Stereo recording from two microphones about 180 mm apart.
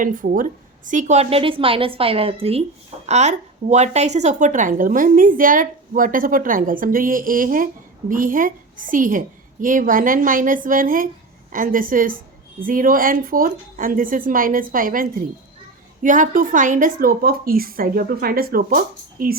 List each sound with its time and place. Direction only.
0.0 s a woman's voice: 50° right (ahead or behind)